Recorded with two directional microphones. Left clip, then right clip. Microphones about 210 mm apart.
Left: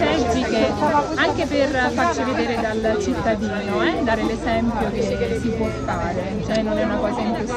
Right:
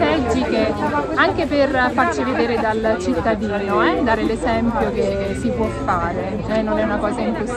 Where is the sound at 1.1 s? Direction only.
10° right (ahead or behind).